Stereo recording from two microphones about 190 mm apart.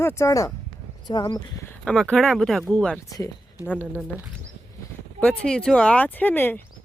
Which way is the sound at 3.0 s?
15° left (ahead or behind).